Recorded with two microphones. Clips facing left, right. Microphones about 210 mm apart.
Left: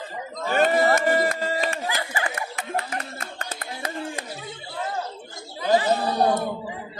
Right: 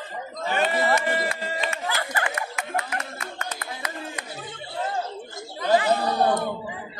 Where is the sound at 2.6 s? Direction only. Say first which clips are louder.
Even; 35° left (ahead or behind).